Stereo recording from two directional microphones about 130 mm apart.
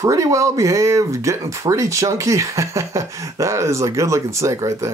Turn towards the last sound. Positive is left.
turn(degrees=-25)  # may be behind; listen again after turning